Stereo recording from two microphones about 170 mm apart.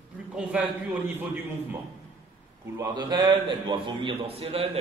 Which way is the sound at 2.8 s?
25° right (ahead or behind).